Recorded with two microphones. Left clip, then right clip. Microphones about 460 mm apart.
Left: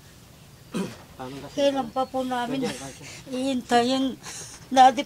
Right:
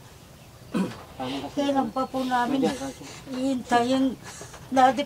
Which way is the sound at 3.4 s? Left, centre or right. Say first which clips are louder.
Left 1 dB; left.